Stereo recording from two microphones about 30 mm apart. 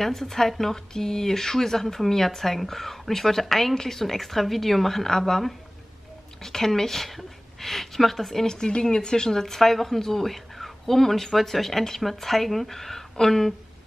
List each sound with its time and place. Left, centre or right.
0.0 s speech: centre
8.5 s speech: left
9.4 s speech: centre